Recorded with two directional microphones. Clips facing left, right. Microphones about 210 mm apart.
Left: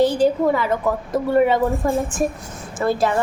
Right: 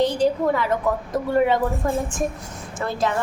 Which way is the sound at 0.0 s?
5° left (ahead or behind).